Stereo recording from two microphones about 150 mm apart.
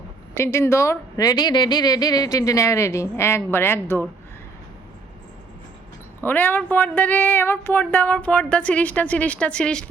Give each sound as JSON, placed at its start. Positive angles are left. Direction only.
{"t": 0.3, "sound": "a woman's voice", "side_deg": 15}
{"t": 6.2, "sound": "speech", "side_deg": 15}